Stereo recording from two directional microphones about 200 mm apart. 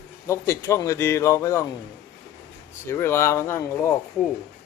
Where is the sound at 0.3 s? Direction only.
15° left (ahead or behind).